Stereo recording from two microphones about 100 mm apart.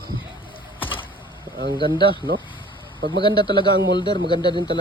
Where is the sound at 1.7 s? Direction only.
50° left (ahead or behind).